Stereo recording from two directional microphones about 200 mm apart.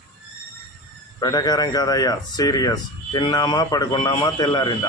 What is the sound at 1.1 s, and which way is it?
Speech, 20° left (ahead or behind).